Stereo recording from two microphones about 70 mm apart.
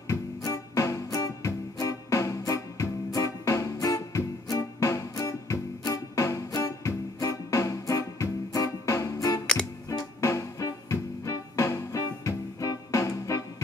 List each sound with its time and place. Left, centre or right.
0.5 s music: left